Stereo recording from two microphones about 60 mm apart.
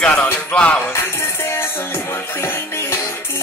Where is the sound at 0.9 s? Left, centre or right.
Left.